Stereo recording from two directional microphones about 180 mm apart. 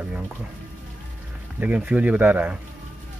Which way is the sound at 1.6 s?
10° right (ahead or behind).